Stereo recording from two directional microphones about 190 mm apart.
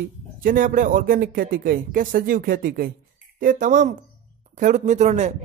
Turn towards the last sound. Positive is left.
turn(degrees=-35)  # may be behind; listen again after turning